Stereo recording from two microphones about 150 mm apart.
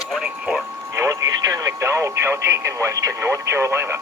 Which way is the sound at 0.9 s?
20° right (ahead or behind).